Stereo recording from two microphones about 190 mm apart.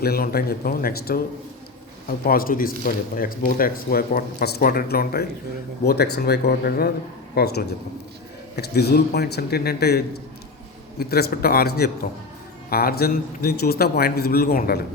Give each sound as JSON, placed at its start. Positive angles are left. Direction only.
{"t": 0.0, "sound": "speech", "side_deg": 50}
{"t": 2.2, "sound": "a man's voice", "side_deg": 50}
{"t": 11.1, "sound": "a man's voice", "side_deg": 55}